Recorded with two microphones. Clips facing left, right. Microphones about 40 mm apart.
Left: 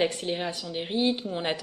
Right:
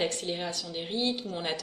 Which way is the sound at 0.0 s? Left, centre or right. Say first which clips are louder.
Left 4 dB; centre.